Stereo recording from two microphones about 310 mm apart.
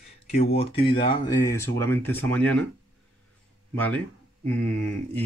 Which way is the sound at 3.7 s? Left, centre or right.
Centre.